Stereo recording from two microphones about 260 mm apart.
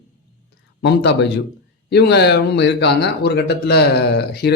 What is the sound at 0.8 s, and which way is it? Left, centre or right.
Speech, left.